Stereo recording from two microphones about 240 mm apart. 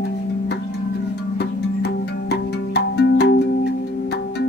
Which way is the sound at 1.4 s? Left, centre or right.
Left.